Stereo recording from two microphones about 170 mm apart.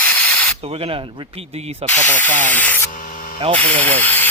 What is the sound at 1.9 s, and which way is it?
Speech, 10° left (ahead or behind).